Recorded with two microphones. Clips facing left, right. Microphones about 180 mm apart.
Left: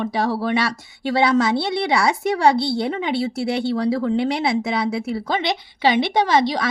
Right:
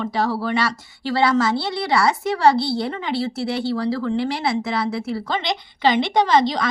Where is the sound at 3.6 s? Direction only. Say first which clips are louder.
Left 2 dB; 20° left (ahead or behind).